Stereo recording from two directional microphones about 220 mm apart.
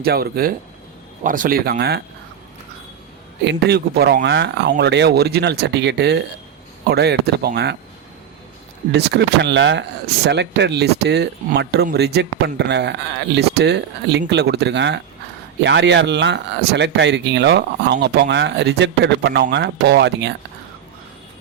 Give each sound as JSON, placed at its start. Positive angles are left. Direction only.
{"t": 0.0, "sound": "speech", "side_deg": -45}
{"t": 3.4, "sound": "speech", "side_deg": -50}
{"t": 8.9, "sound": "speech", "side_deg": -50}